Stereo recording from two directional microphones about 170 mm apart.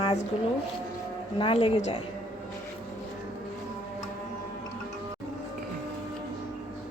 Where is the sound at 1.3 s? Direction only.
30° left (ahead or behind).